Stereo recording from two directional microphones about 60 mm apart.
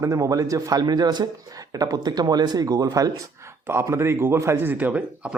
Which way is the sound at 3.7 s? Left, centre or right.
Right.